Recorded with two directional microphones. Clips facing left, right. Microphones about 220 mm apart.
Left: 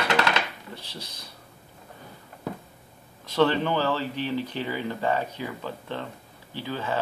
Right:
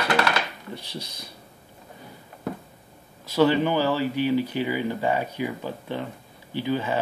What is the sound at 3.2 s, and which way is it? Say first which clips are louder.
Speech: right 3 dB; 5° right (ahead or behind).